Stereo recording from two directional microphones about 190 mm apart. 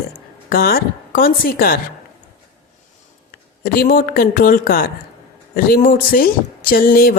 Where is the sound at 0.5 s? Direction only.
50° left (ahead or behind).